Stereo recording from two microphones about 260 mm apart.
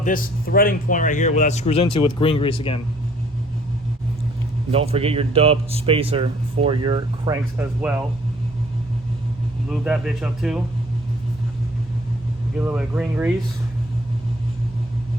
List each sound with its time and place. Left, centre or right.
0.0 s a man's voice: left
4.7 s speech: right
7.6 s speech: centre
9.6 s speech: centre
12.5 s speech: centre